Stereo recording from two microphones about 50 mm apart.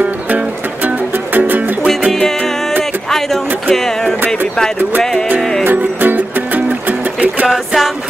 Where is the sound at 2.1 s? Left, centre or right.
Centre.